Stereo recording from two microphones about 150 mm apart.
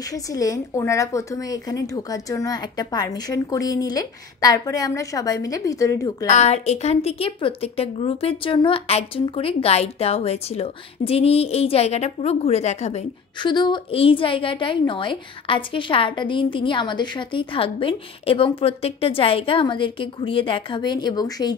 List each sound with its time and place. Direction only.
0.1 s a woman's voice: 25° left (ahead or behind)
6.2 s a woman's voice: 50° left (ahead or behind)
13.4 s a woman's voice: 30° left (ahead or behind)